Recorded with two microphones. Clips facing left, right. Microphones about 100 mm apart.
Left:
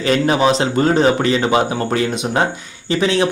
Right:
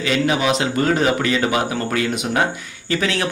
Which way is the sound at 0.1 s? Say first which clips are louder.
Left 4 dB; 35° left (ahead or behind).